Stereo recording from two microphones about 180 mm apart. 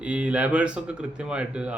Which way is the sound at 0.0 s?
5° right (ahead or behind).